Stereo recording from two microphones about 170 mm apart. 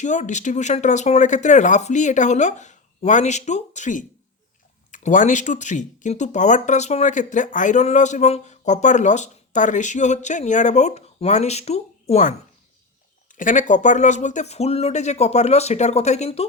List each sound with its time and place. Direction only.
0.0 s speech: 45° left (ahead or behind)